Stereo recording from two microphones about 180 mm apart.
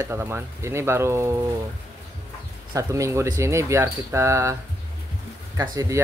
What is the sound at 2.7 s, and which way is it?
Speech, 15° right (ahead or behind).